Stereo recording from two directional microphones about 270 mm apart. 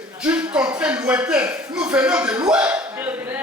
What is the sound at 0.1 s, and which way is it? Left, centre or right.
Speech, centre.